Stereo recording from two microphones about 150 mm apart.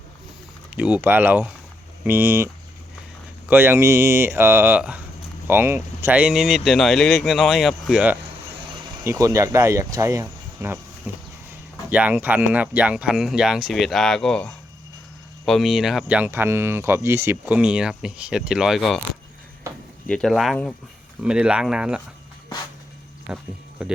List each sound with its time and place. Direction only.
0.8 s speech: 10° right (ahead or behind)
3.5 s speech: 15° right (ahead or behind)
9.0 s speech: 20° right (ahead or behind); by 18.9 s centre (ahead or behind)
20.1 s speech: 5° left (ahead or behind)
23.3 s speech: 5° right (ahead or behind)